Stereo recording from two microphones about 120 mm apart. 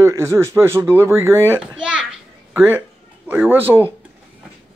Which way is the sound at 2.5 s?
20° right (ahead or behind).